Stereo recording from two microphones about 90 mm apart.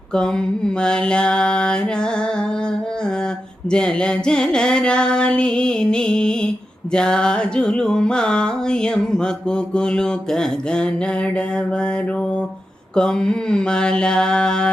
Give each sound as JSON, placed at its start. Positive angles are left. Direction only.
{"t": 0.1, "sound": "music", "side_deg": 10}
{"t": 3.7, "sound": "music", "side_deg": 10}
{"t": 13.0, "sound": "music", "side_deg": 10}